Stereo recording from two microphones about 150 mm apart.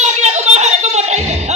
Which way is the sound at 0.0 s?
50° right (ahead or behind).